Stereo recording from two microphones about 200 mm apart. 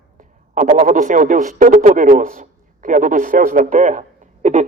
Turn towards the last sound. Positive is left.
turn(degrees=-40)  # may be behind; listen again after turning